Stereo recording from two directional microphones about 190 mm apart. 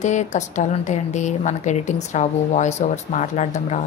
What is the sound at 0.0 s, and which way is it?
Speech, 40° left (ahead or behind).